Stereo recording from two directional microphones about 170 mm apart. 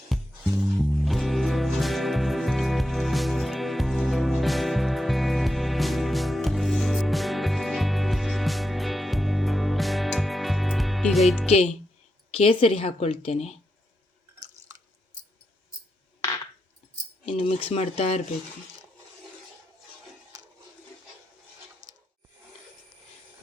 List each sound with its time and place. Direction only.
0.1 s music: centre (ahead or behind)
11.4 s a woman's voice: 40° left (ahead or behind)
17.3 s a woman's voice: 35° left (ahead or behind)
21.8 s rub: 45° right (ahead or behind)